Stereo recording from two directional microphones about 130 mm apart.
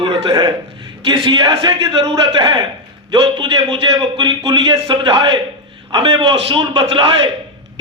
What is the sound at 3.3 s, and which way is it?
Speech, 40° right (ahead or behind).